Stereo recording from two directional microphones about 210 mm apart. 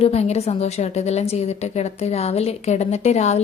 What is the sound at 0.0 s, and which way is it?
A woman's voice, 30° left (ahead or behind).